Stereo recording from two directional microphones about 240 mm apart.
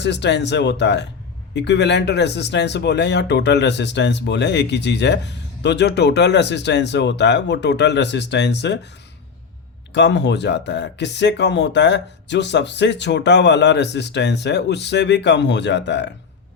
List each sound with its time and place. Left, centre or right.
0.0 s speech: left
9.9 s speech: left